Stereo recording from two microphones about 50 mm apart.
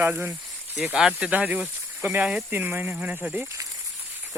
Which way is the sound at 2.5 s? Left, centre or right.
Right.